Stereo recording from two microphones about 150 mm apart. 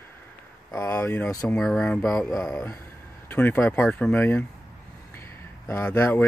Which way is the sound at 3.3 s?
15° left (ahead or behind).